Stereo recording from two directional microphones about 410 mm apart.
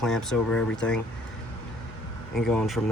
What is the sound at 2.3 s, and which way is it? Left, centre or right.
Speech, centre.